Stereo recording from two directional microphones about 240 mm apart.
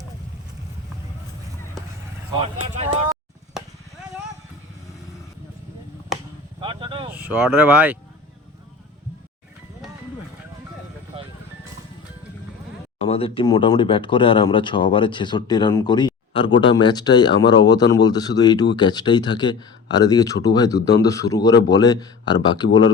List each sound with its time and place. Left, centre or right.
3.6 s a sound: centre
6.6 s vehicle: right
7.1 s speech: centre
13.0 s speech: left